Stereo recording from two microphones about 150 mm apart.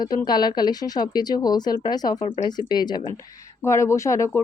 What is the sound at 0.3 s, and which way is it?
Speech, 30° left (ahead or behind).